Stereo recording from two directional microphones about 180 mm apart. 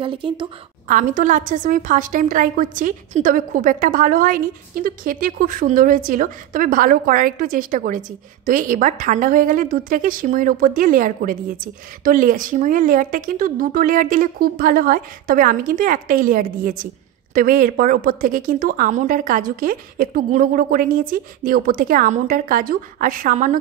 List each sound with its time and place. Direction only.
0.0 s a woman's voice: 30° right (ahead or behind)
0.8 s a woman's voice: 45° right (ahead or behind)